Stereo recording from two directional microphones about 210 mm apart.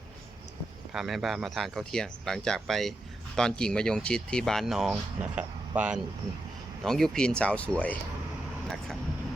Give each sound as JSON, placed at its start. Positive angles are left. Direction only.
{"t": 0.9, "sound": "speech", "side_deg": 0}